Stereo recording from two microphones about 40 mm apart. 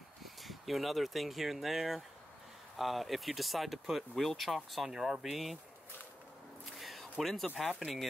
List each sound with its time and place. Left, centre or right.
0.2 s speech: centre
4.9 s speech: centre
5.2 s speech: centre
6.6 s a sound: centre
7.8 s speech: centre